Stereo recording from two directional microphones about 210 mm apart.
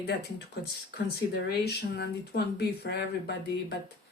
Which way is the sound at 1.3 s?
50° left (ahead or behind).